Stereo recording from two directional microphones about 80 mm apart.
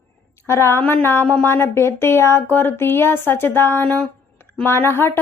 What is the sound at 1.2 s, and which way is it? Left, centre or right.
Speech, centre.